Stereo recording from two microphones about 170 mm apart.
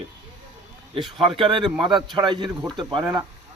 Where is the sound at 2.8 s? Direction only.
25° right (ahead or behind).